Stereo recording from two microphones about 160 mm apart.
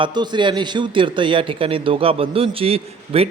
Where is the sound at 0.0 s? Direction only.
30° right (ahead or behind).